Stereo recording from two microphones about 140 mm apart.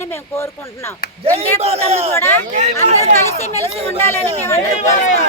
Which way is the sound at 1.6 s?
45° right (ahead or behind).